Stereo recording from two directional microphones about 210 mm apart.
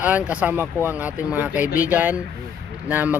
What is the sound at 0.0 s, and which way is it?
Speech, 5° right (ahead or behind).